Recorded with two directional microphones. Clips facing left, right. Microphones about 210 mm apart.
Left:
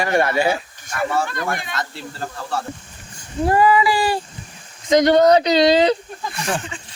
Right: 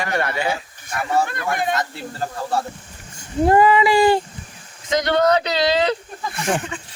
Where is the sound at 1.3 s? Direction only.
50° right (ahead or behind).